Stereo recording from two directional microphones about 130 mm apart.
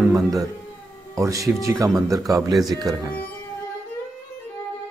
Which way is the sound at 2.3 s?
Centre (ahead or behind).